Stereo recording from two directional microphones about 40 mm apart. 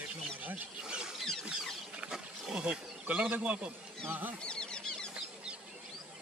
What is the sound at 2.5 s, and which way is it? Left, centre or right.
Wild animals, right.